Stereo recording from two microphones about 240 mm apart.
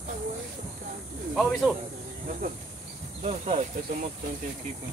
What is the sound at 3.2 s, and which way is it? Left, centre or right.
Speech, right.